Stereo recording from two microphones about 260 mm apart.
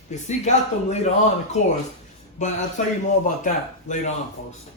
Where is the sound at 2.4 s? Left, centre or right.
Left.